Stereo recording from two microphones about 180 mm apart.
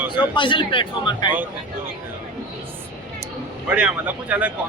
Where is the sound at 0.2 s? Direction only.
25° left (ahead or behind).